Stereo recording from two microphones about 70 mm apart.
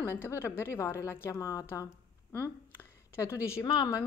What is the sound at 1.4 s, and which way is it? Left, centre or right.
Speech, left.